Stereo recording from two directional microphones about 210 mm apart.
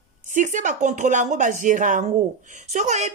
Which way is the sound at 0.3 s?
35° right (ahead or behind).